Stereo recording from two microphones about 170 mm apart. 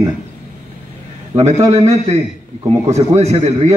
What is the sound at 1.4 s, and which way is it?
Speech, 20° right (ahead or behind).